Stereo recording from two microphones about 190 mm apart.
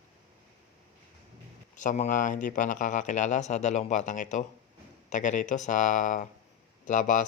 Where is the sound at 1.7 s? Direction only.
40° left (ahead or behind).